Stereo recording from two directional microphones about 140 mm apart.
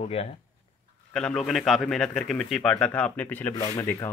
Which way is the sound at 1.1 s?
5° left (ahead or behind).